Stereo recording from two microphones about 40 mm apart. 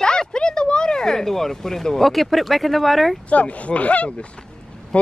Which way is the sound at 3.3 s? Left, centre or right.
Left.